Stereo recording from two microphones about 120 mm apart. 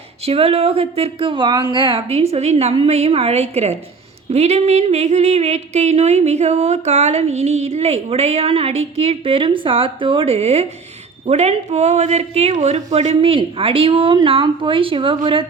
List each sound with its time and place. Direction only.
0.3 s speech: 55° right (ahead or behind); by 2.0 s 40° right (ahead or behind)
2.0 s a sound: 55° right (ahead or behind)
11.3 s speech: 65° right (ahead or behind)
13.2 s speech: 50° right (ahead or behind)